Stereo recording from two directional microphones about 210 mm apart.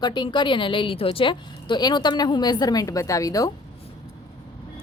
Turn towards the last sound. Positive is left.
turn(degrees=15)  # may be behind; listen again after turning